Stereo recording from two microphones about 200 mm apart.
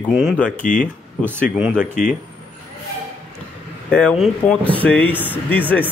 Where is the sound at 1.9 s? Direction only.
40° left (ahead or behind).